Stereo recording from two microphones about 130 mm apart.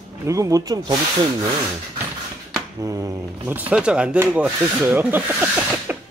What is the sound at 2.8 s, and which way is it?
Speech, 25° right (ahead or behind).